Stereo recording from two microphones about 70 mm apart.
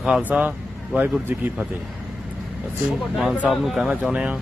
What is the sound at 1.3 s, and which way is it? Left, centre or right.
Speech, right.